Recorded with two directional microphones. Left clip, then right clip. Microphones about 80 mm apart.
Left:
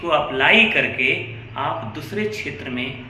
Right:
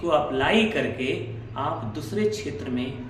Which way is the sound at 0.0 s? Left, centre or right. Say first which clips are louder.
Left 4 dB; right.